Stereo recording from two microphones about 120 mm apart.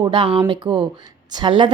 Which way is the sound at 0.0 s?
45° right (ahead or behind).